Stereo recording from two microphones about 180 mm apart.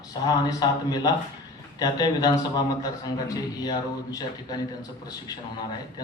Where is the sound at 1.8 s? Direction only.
20° left (ahead or behind).